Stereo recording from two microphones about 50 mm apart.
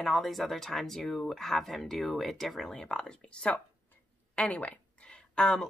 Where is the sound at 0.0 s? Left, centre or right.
Centre.